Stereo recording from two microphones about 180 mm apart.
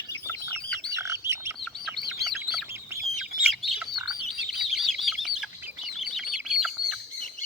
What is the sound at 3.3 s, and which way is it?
Chicken, centre (ahead or behind).